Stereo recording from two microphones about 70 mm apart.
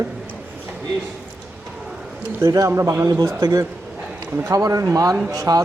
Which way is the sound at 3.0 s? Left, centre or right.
Right.